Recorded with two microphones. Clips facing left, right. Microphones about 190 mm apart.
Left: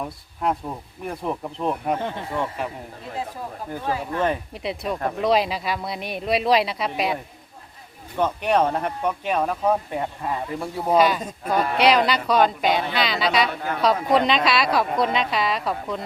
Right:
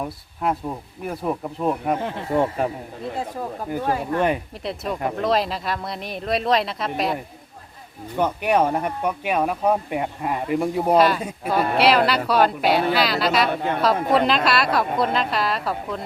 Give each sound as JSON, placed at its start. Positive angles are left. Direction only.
{"t": 0.4, "sound": "a woman's voice", "side_deg": 0}
{"t": 2.3, "sound": "speech", "side_deg": -40}
{"t": 3.8, "sound": "speech", "side_deg": -50}
{"t": 4.6, "sound": "a woman's voice", "side_deg": 0}
{"t": 8.1, "sound": "speech", "side_deg": -10}
{"t": 10.9, "sound": "a woman's voice", "side_deg": 0}